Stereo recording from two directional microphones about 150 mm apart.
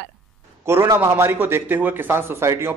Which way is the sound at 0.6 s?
15° right (ahead or behind).